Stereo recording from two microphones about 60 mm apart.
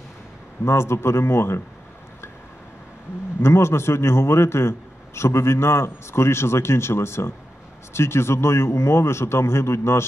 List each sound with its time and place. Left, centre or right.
0.7 s a man's voice: left
3.4 s a man's voice: left